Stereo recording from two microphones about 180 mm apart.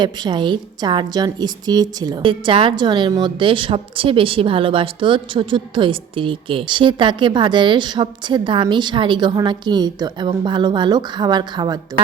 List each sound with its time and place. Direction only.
0.0 s a woman's voice: 25° right (ahead or behind)